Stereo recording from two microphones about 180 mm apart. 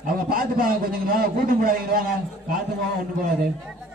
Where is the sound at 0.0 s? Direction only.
55° right (ahead or behind).